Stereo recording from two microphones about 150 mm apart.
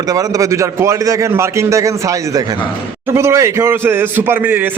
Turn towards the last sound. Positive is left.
turn(degrees=-10)  # may be behind; listen again after turning